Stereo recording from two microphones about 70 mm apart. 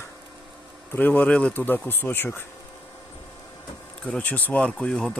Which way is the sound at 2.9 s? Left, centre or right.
Left.